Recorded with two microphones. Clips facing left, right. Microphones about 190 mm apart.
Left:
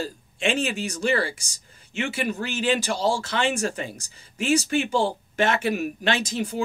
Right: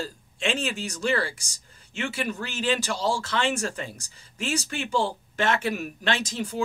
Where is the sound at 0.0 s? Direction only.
15° left (ahead or behind).